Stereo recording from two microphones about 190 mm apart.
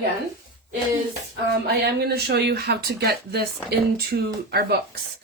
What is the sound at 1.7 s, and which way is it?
Speech, 55° right (ahead or behind).